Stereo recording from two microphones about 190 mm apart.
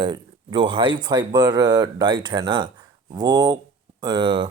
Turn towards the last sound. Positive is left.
turn(degrees=-25)  # may be behind; listen again after turning